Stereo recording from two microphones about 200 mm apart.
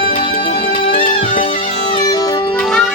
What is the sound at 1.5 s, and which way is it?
Music, 20° left (ahead or behind).